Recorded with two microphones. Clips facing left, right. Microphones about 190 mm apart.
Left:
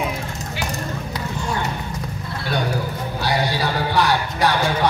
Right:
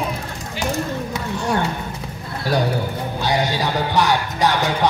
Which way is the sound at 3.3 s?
20° right (ahead or behind).